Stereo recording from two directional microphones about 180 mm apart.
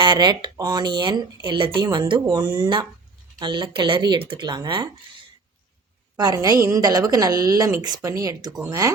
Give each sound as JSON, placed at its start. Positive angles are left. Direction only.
{"t": 0.0, "sound": "speech", "side_deg": -25}
{"t": 6.1, "sound": "speech", "side_deg": -20}